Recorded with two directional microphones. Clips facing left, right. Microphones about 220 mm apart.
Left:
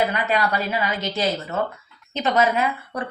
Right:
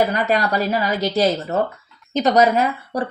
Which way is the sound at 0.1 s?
40° right (ahead or behind).